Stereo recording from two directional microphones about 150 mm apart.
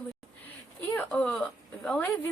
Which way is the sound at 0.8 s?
10° left (ahead or behind).